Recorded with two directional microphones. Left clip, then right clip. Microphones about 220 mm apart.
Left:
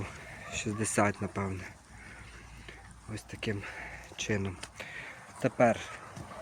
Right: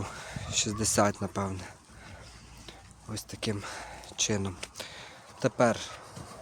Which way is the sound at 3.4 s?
20° right (ahead or behind).